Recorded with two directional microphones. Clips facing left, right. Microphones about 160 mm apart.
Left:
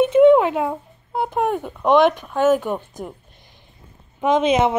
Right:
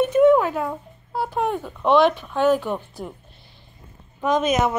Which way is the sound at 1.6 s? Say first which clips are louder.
Left 1 dB; 15° left (ahead or behind).